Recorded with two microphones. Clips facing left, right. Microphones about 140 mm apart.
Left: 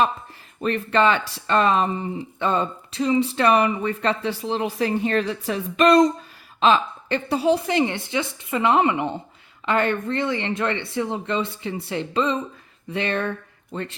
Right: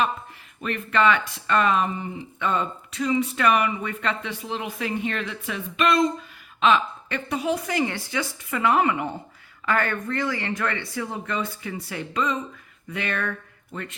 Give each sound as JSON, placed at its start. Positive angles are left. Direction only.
{"t": 0.6, "sound": "a man's voice", "side_deg": 30}